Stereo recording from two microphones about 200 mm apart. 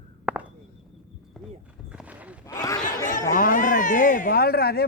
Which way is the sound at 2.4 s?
15° left (ahead or behind).